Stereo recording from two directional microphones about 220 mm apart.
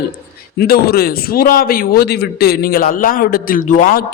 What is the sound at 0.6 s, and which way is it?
A man's voice, 45° left (ahead or behind).